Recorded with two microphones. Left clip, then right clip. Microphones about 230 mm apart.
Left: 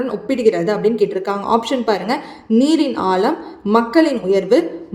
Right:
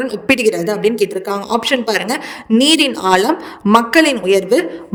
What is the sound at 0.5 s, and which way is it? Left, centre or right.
Speech, centre.